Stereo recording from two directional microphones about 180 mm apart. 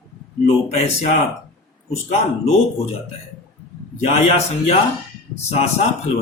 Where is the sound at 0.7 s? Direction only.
35° left (ahead or behind).